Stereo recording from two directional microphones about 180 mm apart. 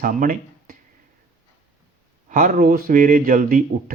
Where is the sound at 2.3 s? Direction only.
50° right (ahead or behind).